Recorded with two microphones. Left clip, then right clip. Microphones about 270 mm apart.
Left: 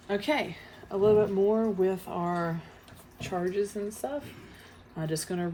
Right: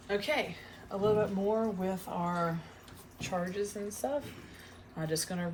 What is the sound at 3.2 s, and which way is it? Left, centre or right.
Speech, left.